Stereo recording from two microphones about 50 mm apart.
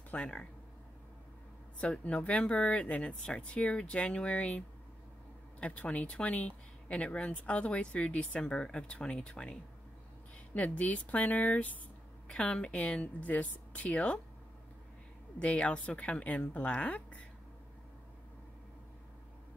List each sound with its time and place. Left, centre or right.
0.1 s speech: left
1.8 s speech: left
12.3 s speech: centre
15.3 s speech: left